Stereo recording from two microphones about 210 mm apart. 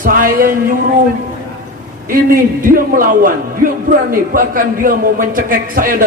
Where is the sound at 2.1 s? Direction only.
40° right (ahead or behind).